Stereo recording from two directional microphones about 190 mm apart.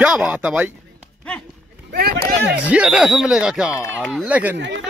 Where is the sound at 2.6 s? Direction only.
5° right (ahead or behind).